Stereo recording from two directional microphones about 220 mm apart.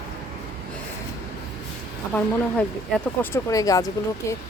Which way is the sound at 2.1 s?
5° left (ahead or behind).